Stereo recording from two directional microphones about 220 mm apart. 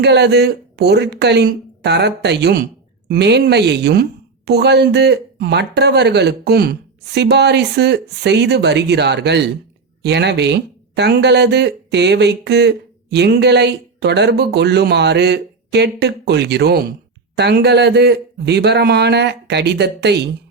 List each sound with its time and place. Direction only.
0.0 s speech: 50° right (ahead or behind)